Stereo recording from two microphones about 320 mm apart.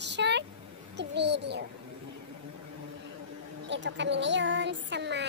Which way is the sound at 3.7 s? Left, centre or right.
Right.